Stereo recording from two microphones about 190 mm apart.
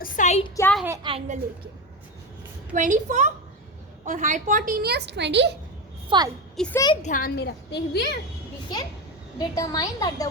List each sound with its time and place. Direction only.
0.0 s a sound: 40° left (ahead or behind)
0.4 s a sound: 15° left (ahead or behind)
1.0 s a child's voice: 30° right (ahead or behind)
2.7 s a woman's voice: 40° right (ahead or behind); by 5.5 s 65° right (ahead or behind)
6.1 s a woman's voice: 20° right (ahead or behind)
6.6 s a child's voice: 10° left (ahead or behind)
7.0 s a woman's voice: 45° left (ahead or behind); by 8.2 s 60° left (ahead or behind)
9.4 s a woman's voice: 20° left (ahead or behind)